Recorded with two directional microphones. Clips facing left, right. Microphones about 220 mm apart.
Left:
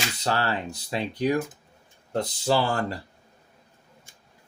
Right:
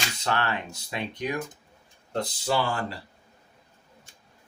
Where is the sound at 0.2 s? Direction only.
35° left (ahead or behind).